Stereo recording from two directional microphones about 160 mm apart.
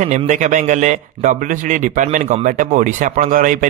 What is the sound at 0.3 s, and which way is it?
Speech, 50° right (ahead or behind).